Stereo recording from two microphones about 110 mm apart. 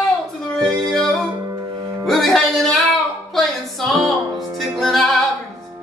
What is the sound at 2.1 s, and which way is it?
Music, centre (ahead or behind).